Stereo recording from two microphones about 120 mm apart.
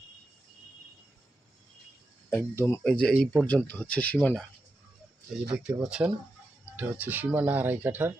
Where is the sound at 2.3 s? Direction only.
15° left (ahead or behind).